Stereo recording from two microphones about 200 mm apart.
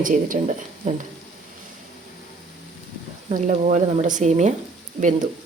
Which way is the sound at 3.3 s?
40° right (ahead or behind).